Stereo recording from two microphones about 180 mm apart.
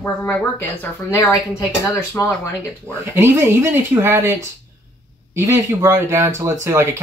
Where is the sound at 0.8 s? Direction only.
15° left (ahead or behind).